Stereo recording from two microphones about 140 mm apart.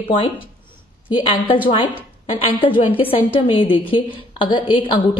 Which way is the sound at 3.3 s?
40° left (ahead or behind).